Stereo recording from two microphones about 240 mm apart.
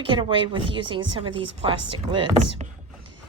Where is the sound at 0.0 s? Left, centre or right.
Right.